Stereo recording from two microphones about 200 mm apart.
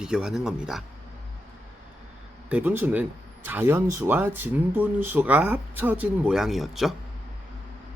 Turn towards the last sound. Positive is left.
turn(degrees=0)  # may be behind; listen again after turning